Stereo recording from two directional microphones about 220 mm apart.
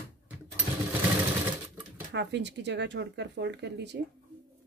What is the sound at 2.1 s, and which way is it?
A woman's voice, 50° right (ahead or behind).